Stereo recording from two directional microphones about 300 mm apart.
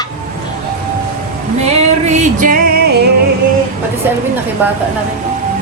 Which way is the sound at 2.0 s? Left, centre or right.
Right.